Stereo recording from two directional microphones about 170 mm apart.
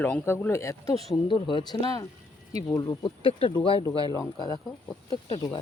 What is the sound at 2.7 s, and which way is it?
Speech, 25° left (ahead or behind).